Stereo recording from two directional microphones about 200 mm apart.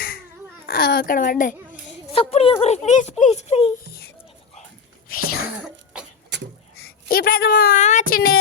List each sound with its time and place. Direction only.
0.7 s a woman's voice: 50° left (ahead or behind)
2.1 s speech: 30° left (ahead or behind)
5.0 s speech: 45° left (ahead or behind)
5.6 s cough: 5° right (ahead or behind)
6.3 s a sound: 60° right (ahead or behind)
7.1 s a woman's voice: 50° left (ahead or behind)